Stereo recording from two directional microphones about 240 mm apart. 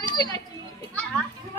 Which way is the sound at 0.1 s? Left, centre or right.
Centre.